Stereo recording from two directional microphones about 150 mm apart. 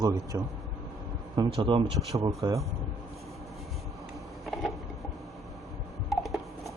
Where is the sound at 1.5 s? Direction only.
35° right (ahead or behind).